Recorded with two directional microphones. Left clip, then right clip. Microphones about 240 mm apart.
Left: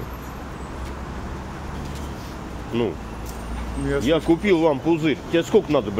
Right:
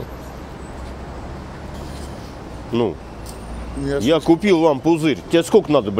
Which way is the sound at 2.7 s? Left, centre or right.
Right.